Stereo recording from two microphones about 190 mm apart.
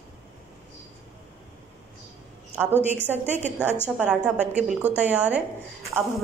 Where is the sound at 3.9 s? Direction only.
5° right (ahead or behind).